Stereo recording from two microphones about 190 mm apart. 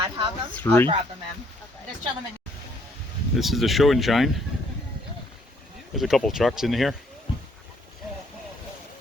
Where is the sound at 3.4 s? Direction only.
Centre (ahead or behind).